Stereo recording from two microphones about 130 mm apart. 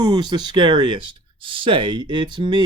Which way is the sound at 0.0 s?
35° right (ahead or behind).